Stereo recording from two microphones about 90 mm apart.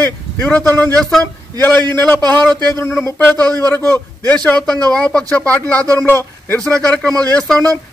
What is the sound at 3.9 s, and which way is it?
A man's voice, 20° left (ahead or behind).